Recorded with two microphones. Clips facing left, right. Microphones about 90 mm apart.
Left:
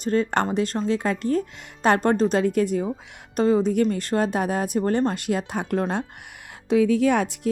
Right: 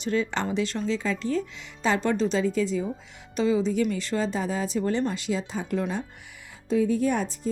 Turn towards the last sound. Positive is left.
turn(degrees=80)